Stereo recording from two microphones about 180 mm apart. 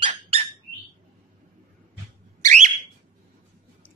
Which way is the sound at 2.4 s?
40° right (ahead or behind).